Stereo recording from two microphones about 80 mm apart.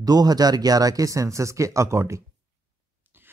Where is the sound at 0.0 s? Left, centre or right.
Right.